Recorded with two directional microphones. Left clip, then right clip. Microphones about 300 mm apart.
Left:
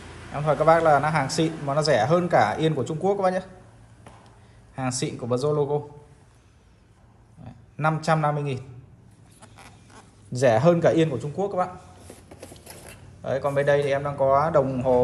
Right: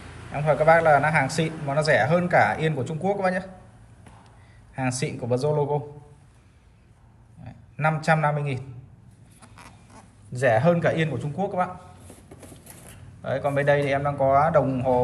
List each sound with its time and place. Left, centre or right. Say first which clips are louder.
0.3 s a man's voice: right 1 dB; centre
4.7 s a man's voice: right 1 dB; centre
7.4 s a man's voice: even; centre
9.4 s duck: even; centre
9.9 s a man's voice: left 4 dB; centre
12.4 s a sound: left 3 dB; left
13.2 s a man's voice: left 1 dB; centre